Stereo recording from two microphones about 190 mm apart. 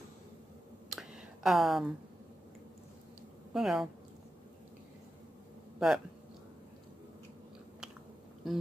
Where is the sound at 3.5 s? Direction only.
Centre (ahead or behind).